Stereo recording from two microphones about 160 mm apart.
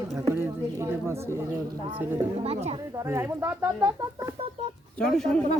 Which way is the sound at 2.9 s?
20° right (ahead or behind).